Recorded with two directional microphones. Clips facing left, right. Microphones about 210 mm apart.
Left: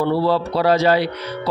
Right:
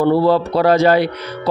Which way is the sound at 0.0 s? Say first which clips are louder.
Right 4 dB; 50° right (ahead or behind).